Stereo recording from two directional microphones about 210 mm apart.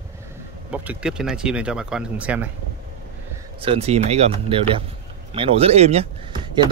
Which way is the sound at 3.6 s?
30° right (ahead or behind).